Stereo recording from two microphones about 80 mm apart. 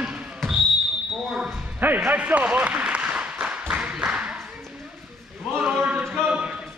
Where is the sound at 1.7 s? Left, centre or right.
Right.